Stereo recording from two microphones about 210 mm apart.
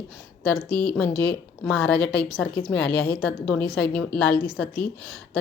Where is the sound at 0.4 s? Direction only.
5° left (ahead or behind).